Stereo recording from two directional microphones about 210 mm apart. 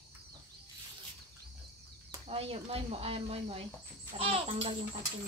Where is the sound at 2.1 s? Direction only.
30° right (ahead or behind).